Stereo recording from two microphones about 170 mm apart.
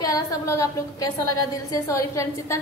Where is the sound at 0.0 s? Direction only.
20° left (ahead or behind).